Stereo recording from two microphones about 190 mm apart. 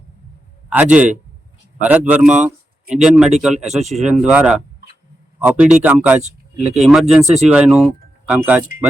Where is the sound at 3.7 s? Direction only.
35° right (ahead or behind).